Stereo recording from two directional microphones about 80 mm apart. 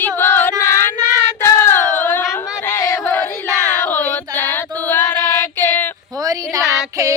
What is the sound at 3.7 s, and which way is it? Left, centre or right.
Mantra, left.